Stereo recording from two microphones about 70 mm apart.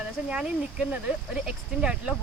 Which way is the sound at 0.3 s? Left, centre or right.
Centre.